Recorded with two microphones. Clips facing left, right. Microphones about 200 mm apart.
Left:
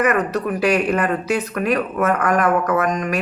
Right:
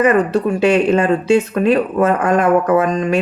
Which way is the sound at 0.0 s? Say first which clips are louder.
Right 5 dB; 30° right (ahead or behind).